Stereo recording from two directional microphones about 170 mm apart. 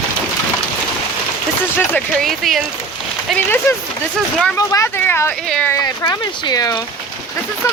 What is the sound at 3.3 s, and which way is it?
Speech, 15° left (ahead or behind).